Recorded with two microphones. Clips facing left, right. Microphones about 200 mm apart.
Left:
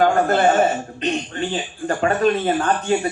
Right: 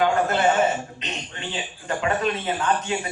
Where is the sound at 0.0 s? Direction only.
45° left (ahead or behind).